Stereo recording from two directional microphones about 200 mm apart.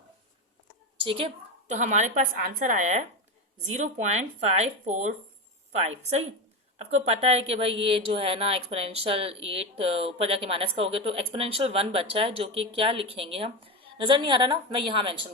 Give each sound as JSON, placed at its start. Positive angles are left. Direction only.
{"t": 1.6, "sound": "speech", "side_deg": -35}
{"t": 7.1, "sound": "speech", "side_deg": -30}